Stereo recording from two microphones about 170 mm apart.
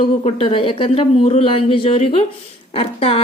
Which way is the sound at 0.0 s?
35° left (ahead or behind).